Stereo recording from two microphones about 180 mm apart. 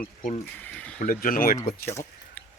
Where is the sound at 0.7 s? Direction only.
5° left (ahead or behind).